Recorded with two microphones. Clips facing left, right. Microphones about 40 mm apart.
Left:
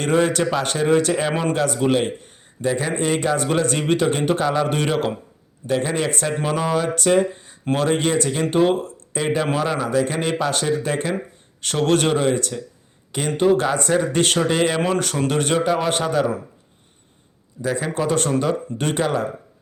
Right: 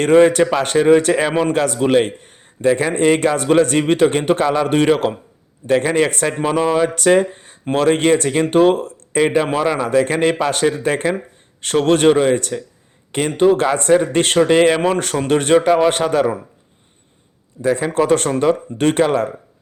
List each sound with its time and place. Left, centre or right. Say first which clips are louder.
0.0 s a man's voice: right 7 dB; right
1.3 s a man's voice: right 4 dB; centre
1.5 s a man's voice: right 4 dB; right
17.6 s a man's voice: right 6 dB; right